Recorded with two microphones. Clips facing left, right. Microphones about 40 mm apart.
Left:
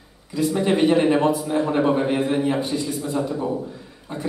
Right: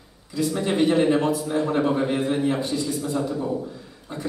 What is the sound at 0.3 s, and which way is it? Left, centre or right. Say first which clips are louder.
A man's voice: left 3 dB; centre.